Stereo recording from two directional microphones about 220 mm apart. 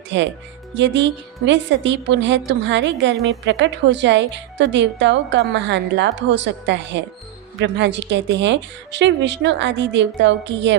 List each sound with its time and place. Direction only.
0.8 s a woman's voice: 55° right (ahead or behind)